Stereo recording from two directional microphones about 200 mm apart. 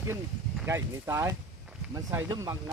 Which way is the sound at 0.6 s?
15° right (ahead or behind).